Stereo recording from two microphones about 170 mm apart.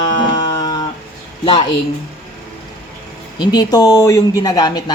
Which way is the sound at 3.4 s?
25° left (ahead or behind).